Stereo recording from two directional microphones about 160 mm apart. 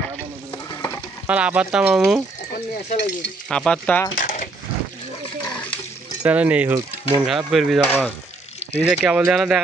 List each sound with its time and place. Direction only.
1.2 s speech: 10° right (ahead or behind)
2.9 s sizzle: 90° left
3.4 s speech: 5° left (ahead or behind)
4.2 s a sound: 60° left (ahead or behind)
6.2 s speech: 10° right (ahead or behind)
7.2 s speech: centre (ahead or behind)